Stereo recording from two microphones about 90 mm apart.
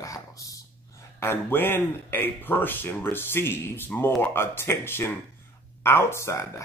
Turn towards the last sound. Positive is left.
turn(degrees=30)  # may be behind; listen again after turning